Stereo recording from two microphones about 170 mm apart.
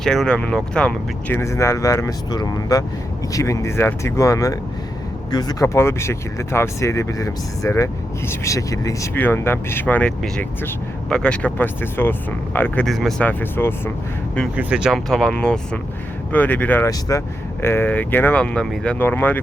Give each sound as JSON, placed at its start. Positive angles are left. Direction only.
{"t": 0.0, "sound": "speech", "side_deg": 5}
{"t": 1.4, "sound": "speech", "side_deg": 15}
{"t": 14.5, "sound": "speech", "side_deg": -5}